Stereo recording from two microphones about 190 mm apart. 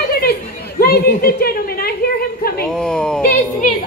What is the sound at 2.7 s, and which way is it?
Speech, 5° left (ahead or behind).